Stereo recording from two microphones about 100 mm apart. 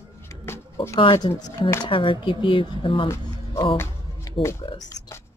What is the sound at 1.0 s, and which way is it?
Speech, 60° left (ahead or behind).